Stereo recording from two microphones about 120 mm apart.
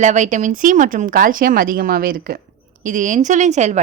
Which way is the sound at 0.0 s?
90° right.